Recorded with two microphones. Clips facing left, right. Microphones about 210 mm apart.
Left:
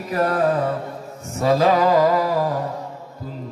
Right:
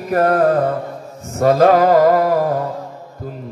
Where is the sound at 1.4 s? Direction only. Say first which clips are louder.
Right 5 dB; 50° right (ahead or behind).